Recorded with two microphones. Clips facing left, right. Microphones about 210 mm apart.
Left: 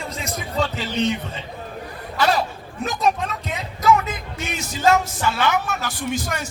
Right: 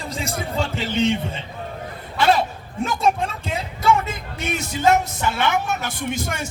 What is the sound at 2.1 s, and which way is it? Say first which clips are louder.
Speech: right 2 dB; 25° right (ahead or behind).